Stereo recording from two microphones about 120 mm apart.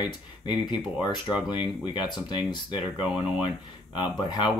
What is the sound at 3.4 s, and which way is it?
Speech, 40° left (ahead or behind).